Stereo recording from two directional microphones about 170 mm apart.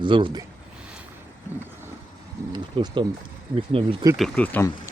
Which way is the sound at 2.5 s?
25° right (ahead or behind).